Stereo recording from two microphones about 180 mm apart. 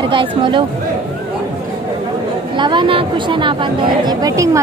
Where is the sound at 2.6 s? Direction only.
25° right (ahead or behind).